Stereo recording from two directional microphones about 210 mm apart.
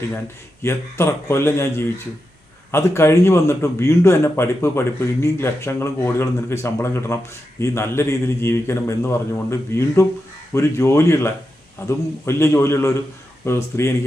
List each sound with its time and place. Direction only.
0.6 s a man's voice: 10° left (ahead or behind)